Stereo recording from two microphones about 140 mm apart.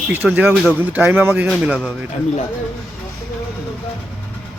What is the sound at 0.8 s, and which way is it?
Speech, 15° right (ahead or behind).